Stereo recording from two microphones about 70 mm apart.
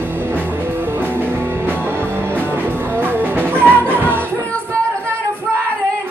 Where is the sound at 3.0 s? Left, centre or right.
Right.